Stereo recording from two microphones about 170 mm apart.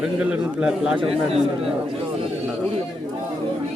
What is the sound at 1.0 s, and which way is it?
Speech, 35° right (ahead or behind).